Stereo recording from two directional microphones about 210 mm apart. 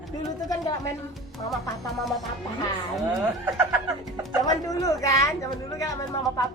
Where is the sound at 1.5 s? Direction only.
Centre (ahead or behind).